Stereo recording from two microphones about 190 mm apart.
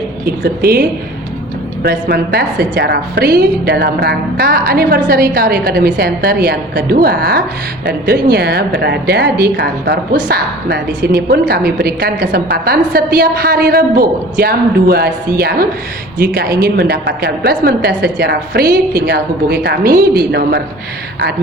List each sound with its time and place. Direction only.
0.4 s a woman's voice: 50° right (ahead or behind)